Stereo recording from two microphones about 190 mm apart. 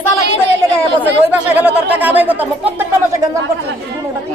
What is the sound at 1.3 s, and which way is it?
Speech, 10° right (ahead or behind).